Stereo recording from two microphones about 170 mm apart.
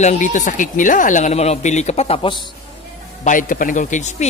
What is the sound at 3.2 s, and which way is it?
Speech, 50° left (ahead or behind).